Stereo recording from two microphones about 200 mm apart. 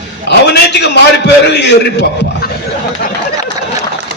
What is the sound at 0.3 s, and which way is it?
A man's voice, 60° left (ahead or behind).